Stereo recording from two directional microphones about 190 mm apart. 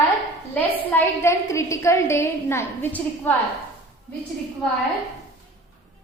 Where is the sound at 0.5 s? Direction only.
10° left (ahead or behind).